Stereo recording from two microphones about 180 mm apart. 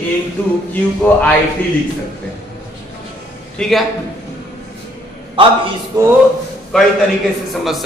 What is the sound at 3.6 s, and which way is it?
Speech, centre (ahead or behind).